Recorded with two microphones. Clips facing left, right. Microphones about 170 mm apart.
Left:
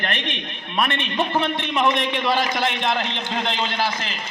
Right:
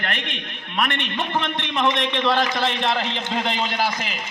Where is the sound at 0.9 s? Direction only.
10° left (ahead or behind).